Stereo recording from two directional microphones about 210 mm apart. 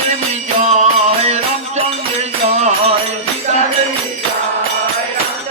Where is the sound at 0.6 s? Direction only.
30° right (ahead or behind).